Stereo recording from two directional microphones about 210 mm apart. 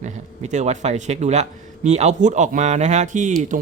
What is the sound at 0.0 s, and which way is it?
Speech, 35° right (ahead or behind).